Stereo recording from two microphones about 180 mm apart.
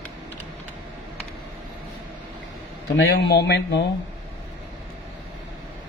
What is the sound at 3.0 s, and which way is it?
Speech, 65° left (ahead or behind).